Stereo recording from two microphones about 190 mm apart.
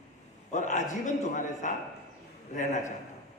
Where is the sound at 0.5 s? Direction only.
40° left (ahead or behind).